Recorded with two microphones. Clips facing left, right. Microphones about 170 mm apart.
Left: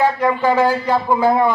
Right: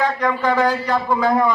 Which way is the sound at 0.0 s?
10° left (ahead or behind).